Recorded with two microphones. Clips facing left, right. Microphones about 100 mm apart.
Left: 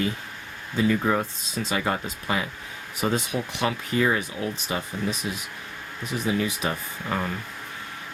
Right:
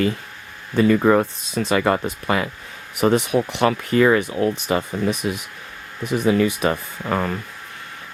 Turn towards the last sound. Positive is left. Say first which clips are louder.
# right 5 dB
turn(degrees=-60)  # may be behind; listen again after turning